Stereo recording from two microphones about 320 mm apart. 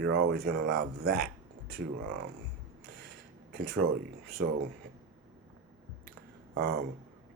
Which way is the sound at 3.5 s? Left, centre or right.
Right.